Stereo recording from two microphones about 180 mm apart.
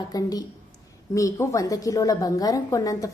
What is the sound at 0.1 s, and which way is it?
A woman's voice, 20° left (ahead or behind).